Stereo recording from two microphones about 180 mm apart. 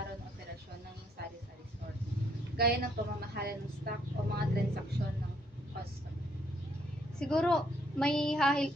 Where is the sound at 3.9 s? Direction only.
55° right (ahead or behind).